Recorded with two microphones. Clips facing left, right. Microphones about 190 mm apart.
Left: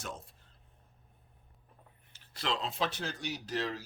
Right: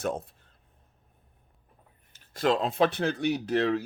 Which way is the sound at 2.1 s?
50° right (ahead or behind).